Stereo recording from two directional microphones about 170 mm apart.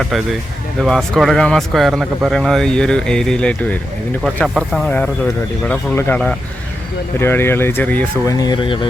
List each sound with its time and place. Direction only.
0.8 s speech: centre (ahead or behind)
8.2 s speech: 20° left (ahead or behind)